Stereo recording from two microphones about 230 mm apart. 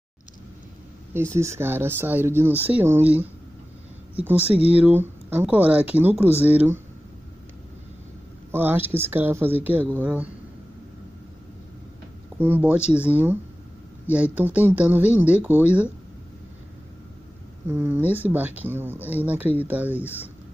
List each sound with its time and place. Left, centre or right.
1.1 s speech: centre
4.6 s speech: centre
8.5 s speech: centre
12.4 s speech: centre
17.6 s speech: centre